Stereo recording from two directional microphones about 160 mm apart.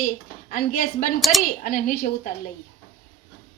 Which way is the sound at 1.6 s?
65° left (ahead or behind).